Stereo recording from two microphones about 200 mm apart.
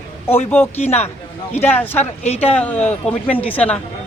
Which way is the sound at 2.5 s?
5° left (ahead or behind).